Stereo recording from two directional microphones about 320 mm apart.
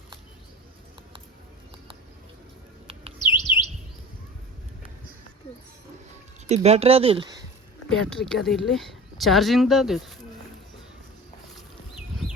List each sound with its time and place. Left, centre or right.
3.3 s bird: centre
6.5 s speech: centre
7.9 s speech: centre